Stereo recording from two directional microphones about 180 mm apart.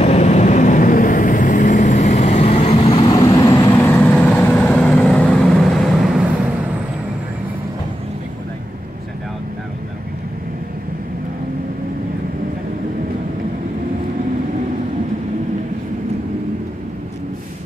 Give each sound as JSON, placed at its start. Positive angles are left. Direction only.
{"t": 0.0, "sound": "vehicle", "side_deg": 35}
{"t": 3.7, "sound": "vehicle", "side_deg": 10}